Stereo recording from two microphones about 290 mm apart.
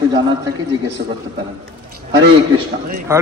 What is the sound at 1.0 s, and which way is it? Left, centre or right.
Speech, right.